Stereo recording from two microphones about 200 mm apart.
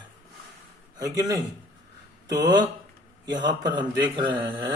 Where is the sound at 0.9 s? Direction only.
15° right (ahead or behind).